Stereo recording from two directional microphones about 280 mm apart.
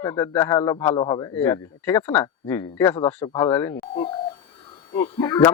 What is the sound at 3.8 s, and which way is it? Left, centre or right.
A man's voice, left.